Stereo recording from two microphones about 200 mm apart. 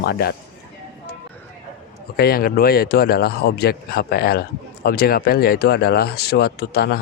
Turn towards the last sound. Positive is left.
turn(degrees=50)  # may be behind; listen again after turning